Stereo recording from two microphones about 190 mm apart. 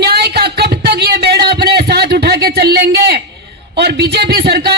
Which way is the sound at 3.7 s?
60° right (ahead or behind).